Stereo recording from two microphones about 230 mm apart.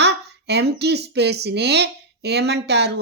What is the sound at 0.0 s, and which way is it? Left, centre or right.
A woman's voice, right.